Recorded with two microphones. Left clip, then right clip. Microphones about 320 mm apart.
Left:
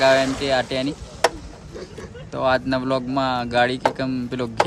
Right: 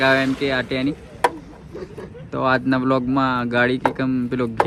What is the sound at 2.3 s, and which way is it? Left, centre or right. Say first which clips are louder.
Speech: right 1 dB; centre.